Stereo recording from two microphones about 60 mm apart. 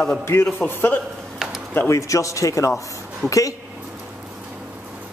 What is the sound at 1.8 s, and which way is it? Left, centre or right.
Speech, left.